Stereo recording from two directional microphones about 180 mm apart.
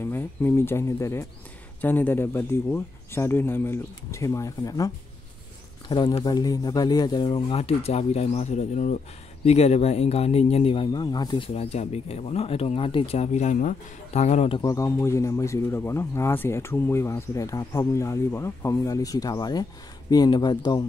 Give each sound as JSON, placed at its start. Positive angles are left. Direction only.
{"t": 0.0, "sound": "speech", "side_deg": 10}
{"t": 14.6, "sound": "speech", "side_deg": 20}